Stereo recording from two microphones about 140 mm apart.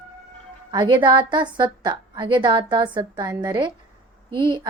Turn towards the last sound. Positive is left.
turn(degrees=-35)  # may be behind; listen again after turning